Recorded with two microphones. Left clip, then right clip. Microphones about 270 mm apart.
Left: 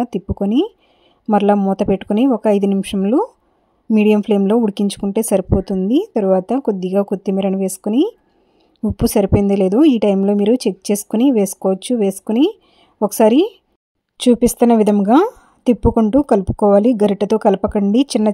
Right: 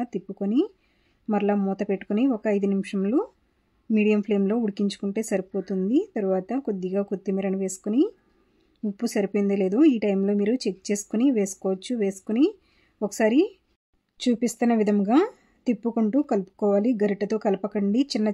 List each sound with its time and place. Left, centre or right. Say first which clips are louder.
0.0 s speech: left 10 dB; left
8.9 s speech: left 10 dB; left